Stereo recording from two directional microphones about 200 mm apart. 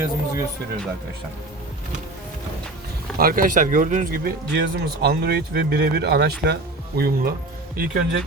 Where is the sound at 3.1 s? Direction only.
45° right (ahead or behind).